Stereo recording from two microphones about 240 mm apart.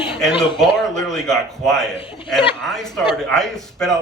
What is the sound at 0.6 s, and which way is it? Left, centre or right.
A man's voice, centre.